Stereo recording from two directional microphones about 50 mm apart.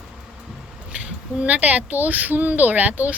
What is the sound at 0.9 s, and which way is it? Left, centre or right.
Speech, right.